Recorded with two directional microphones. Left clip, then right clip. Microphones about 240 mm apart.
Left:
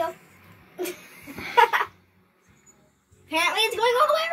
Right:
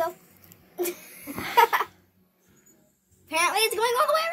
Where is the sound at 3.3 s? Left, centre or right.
Right.